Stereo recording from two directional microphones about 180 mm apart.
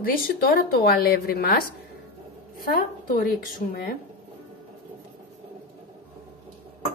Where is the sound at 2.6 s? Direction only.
55° left (ahead or behind).